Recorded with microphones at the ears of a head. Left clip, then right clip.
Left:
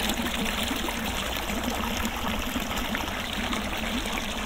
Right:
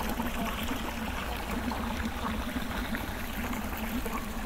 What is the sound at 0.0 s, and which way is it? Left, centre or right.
Trickle, left.